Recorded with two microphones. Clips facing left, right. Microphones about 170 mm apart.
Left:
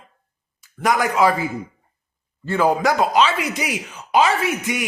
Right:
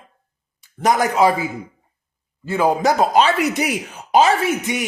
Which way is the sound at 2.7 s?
25° right (ahead or behind).